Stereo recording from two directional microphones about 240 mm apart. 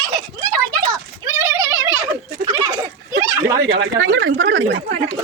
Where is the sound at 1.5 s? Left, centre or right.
Centre.